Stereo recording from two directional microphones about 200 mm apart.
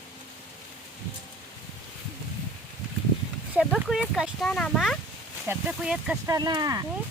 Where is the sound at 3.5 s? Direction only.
5° right (ahead or behind).